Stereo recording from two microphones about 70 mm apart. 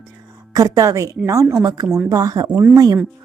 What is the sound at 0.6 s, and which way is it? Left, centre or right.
Speech, right.